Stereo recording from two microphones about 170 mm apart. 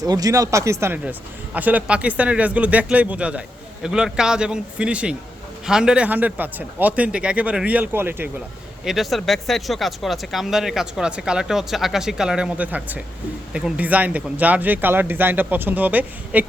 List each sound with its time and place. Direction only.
0.0 s speech: 20° right (ahead or behind)
8.8 s speech: centre (ahead or behind)